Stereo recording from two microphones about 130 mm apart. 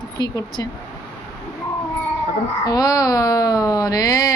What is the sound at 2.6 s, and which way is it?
Speech, 30° left (ahead or behind).